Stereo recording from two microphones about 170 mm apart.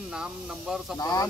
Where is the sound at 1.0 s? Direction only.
20° left (ahead or behind).